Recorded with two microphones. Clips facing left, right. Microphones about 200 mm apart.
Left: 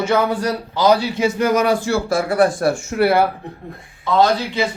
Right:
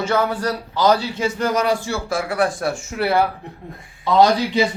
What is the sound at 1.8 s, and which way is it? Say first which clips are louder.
Speech: left 5 dB; 40° left (ahead or behind).